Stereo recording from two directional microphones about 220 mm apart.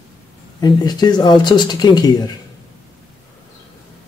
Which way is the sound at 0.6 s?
20° left (ahead or behind).